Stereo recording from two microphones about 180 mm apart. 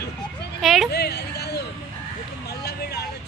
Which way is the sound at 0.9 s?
65° left (ahead or behind).